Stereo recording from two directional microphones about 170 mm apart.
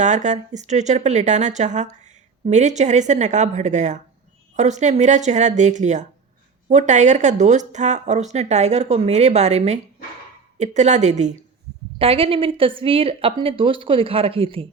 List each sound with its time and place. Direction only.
0.0 s speech: 45° right (ahead or behind)
11.9 s a woman's voice: 35° right (ahead or behind)